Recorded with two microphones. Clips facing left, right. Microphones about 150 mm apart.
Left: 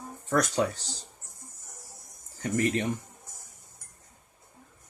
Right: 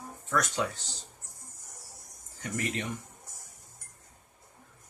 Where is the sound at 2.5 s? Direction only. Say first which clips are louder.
Left 7 dB; 40° left (ahead or behind).